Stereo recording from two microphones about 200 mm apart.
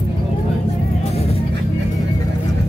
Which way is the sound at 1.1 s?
30° left (ahead or behind).